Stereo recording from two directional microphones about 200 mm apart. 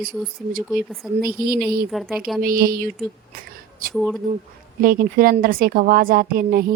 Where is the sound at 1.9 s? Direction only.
Centre (ahead or behind).